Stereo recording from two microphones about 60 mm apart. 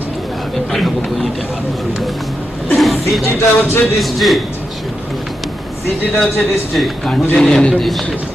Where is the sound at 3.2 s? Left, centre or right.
Left.